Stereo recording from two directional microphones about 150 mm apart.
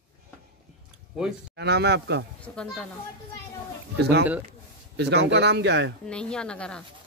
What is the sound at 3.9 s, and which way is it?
Speech, 90° right.